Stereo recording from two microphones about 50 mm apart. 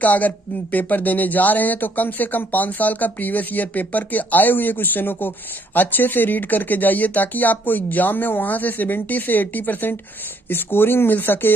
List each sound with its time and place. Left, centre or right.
0.0 s speech: left